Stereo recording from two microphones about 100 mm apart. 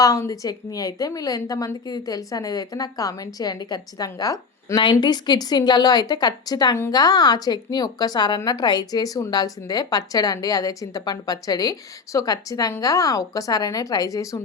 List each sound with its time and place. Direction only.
0.0 s a woman's voice: 35° left (ahead or behind)
4.8 s a woman's voice: 50° left (ahead or behind); by 14.4 s 35° left (ahead or behind)